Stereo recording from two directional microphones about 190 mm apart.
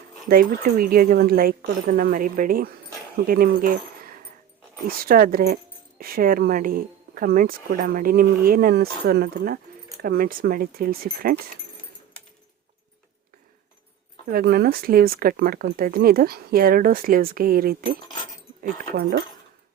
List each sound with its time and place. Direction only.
0.3 s speech: 50° right (ahead or behind)
14.3 s speech: 55° right (ahead or behind)